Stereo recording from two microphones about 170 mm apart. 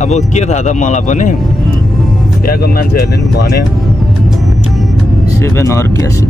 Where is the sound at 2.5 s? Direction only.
60° left (ahead or behind).